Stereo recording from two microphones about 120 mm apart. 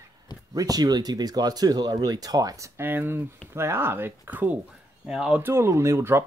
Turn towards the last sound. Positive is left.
turn(degrees=-20)  # may be behind; listen again after turning